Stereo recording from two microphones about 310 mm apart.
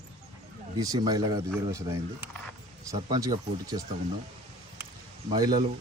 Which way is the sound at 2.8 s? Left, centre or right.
Centre.